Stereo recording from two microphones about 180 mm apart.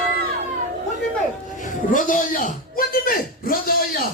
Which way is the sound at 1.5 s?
45° left (ahead or behind).